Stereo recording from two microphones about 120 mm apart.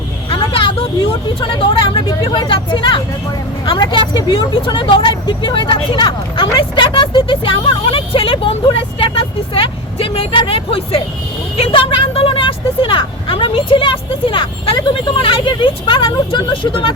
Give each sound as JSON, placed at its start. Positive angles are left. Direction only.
{"t": 0.3, "sound": "vehicle", "side_deg": 50}
{"t": 1.4, "sound": "speech", "side_deg": 45}
{"t": 11.5, "sound": "a sound", "side_deg": 50}
{"t": 15.2, "sound": "speech", "side_deg": 45}